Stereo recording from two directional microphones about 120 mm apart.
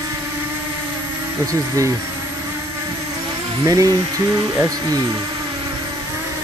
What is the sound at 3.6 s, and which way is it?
Speech, 30° right (ahead or behind).